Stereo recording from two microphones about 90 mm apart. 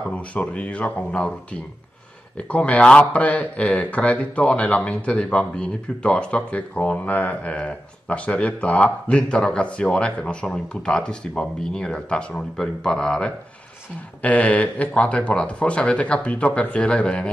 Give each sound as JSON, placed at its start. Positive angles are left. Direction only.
{"t": 0.1, "sound": "speech", "side_deg": 15}